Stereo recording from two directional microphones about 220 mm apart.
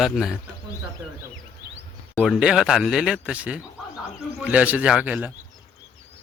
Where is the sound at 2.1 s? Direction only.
Centre (ahead or behind).